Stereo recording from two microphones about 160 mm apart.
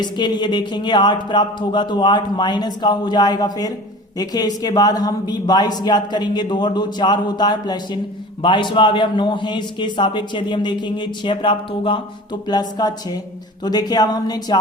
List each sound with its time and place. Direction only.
0.0 s a man's voice: 30° left (ahead or behind)